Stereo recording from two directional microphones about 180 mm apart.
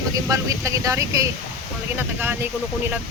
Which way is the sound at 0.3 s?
20° right (ahead or behind).